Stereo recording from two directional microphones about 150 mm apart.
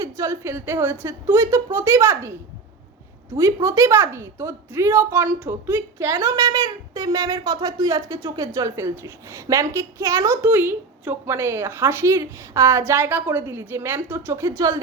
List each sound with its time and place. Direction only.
0.0 s a woman's voice: 20° right (ahead or behind)
3.3 s a woman's voice: 20° right (ahead or behind)